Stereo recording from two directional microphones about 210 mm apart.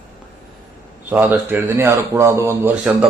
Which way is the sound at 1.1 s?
10° right (ahead or behind).